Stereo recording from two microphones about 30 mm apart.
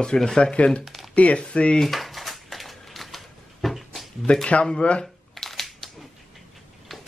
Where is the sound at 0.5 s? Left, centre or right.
Left.